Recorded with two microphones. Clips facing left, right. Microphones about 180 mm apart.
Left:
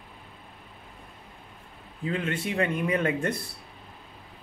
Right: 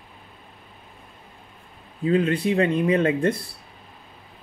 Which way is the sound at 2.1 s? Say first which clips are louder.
Right 9 dB; 25° right (ahead or behind).